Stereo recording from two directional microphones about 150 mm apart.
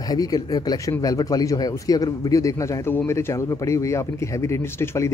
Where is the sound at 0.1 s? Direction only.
25° left (ahead or behind).